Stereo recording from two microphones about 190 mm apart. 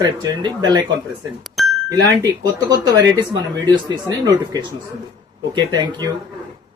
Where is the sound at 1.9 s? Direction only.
20° right (ahead or behind).